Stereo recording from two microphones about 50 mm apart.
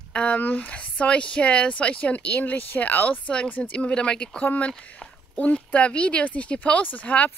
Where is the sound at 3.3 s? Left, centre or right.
Left.